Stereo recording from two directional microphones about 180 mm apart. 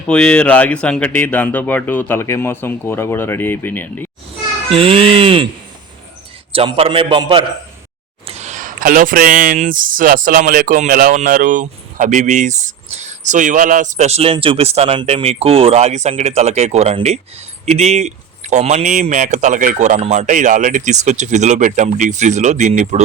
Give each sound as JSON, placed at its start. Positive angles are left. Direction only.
{"t": 0.1, "sound": "speech", "side_deg": 5}
{"t": 4.7, "sound": "speech", "side_deg": -30}
{"t": 6.5, "sound": "a man's voice", "side_deg": -30}
{"t": 8.3, "sound": "speech", "side_deg": -40}